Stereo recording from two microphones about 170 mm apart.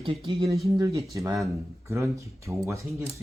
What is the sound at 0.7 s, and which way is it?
Speech, 20° right (ahead or behind).